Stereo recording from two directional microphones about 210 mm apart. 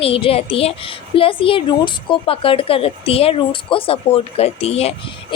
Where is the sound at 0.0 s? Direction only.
25° left (ahead or behind).